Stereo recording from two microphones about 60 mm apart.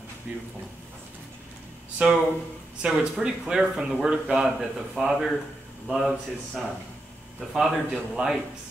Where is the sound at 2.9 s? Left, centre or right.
Centre.